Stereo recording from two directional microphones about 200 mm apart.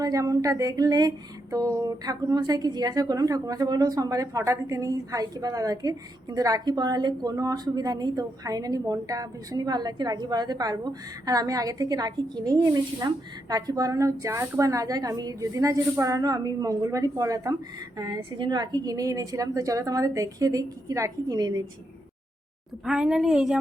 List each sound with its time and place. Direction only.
0.0 s music: 15° right (ahead or behind)
13.5 s a woman's voice: 20° right (ahead or behind)
22.8 s a woman's voice: 5° right (ahead or behind)